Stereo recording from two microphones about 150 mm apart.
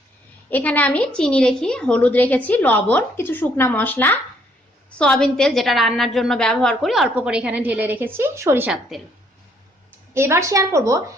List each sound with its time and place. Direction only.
0.5 s a woman's voice: 10° left (ahead or behind); by 8.7 s 15° right (ahead or behind)
8.9 s a woman's voice: centre (ahead or behind)
10.2 s a woman's voice: 15° right (ahead or behind)